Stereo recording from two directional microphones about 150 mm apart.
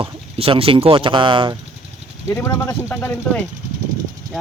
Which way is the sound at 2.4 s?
20° left (ahead or behind).